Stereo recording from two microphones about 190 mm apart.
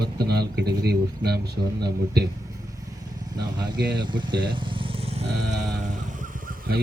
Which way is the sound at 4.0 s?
25° right (ahead or behind).